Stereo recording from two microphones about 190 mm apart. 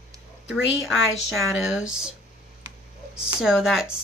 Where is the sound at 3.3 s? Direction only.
Centre (ahead or behind).